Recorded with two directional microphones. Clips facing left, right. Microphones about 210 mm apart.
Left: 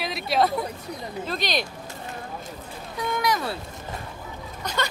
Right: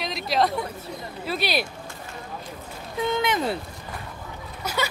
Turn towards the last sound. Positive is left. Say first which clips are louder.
# right 1 dB
turn(degrees=-5)  # may be behind; listen again after turning